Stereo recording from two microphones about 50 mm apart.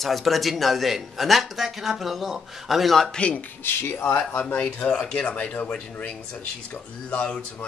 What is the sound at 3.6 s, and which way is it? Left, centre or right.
Speech, left.